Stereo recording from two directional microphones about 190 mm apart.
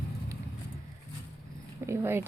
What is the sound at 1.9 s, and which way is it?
Speech, 10° right (ahead or behind).